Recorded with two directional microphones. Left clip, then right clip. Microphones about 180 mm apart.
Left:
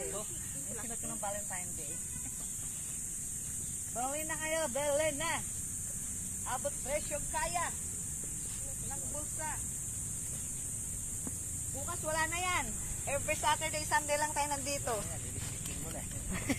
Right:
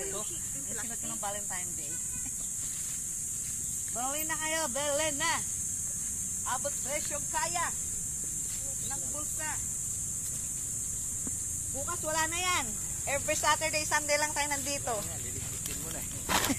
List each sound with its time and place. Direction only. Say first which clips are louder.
3.9 s speech: right 2 dB; 5° left (ahead or behind)
6.4 s speech: right 3 dB; centre (ahead or behind)
11.9 s speech: right 2 dB; centre (ahead or behind); by 15.0 s 40° left (ahead or behind)